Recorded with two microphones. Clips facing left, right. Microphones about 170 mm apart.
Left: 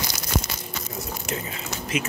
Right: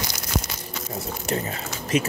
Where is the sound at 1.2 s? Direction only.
45° right (ahead or behind).